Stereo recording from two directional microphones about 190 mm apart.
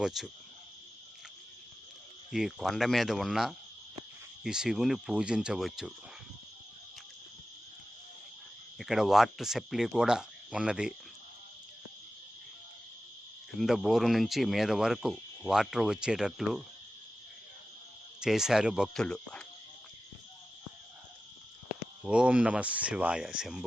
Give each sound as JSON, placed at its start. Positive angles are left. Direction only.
{"t": 0.0, "sound": "speech", "side_deg": 0}
{"t": 2.3, "sound": "speech", "side_deg": 0}
{"t": 8.8, "sound": "speech", "side_deg": 0}
{"t": 13.6, "sound": "speech", "side_deg": 0}
{"t": 18.2, "sound": "speech", "side_deg": -5}
{"t": 22.0, "sound": "speech", "side_deg": -5}